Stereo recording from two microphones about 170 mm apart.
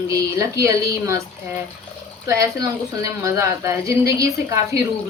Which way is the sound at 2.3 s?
20° right (ahead or behind).